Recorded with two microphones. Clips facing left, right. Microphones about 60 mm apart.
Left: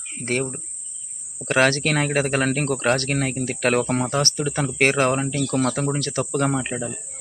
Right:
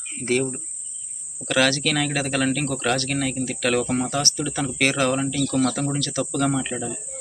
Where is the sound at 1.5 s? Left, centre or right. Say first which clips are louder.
Left 2 dB; left.